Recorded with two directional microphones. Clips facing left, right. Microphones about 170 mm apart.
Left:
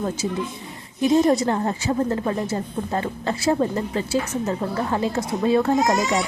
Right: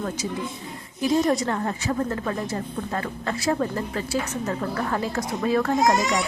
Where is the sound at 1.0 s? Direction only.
25° left (ahead or behind).